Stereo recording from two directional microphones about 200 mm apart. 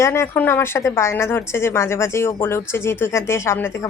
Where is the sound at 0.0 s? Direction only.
10° left (ahead or behind).